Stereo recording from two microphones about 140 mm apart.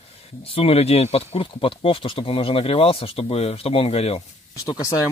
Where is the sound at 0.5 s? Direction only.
45° left (ahead or behind).